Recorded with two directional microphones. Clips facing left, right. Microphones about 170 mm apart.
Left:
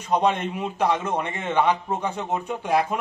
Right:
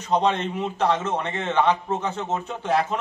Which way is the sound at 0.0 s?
10° left (ahead or behind).